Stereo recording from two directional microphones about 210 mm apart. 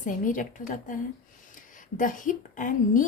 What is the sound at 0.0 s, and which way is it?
A woman's voice, 40° left (ahead or behind).